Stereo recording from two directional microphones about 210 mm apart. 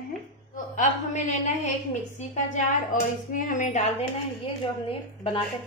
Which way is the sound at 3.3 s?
40° left (ahead or behind).